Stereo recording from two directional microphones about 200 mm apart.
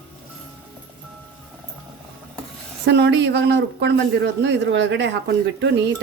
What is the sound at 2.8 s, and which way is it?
Speech, 60° right (ahead or behind).